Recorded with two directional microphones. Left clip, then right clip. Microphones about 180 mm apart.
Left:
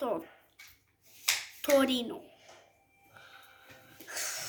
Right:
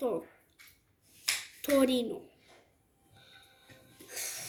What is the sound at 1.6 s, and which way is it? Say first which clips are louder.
Speech: even; centre (ahead or behind).